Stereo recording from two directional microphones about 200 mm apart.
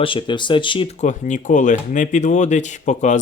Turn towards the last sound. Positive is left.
turn(degrees=35)  # may be behind; listen again after turning